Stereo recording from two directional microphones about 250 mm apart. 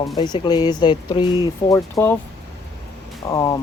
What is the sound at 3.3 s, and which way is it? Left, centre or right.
Speech, centre.